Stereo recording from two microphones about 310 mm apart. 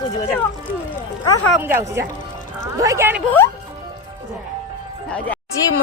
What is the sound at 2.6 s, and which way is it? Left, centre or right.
Speech, centre.